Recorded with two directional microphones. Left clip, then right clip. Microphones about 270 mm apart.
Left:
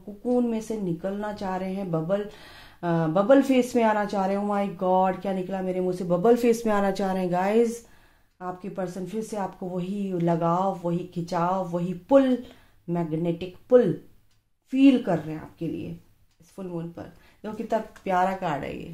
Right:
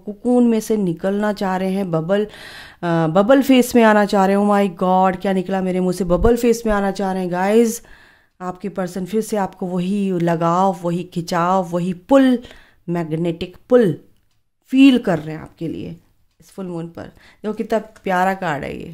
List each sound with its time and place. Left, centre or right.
0.2 s speech: right
8.4 s speech: right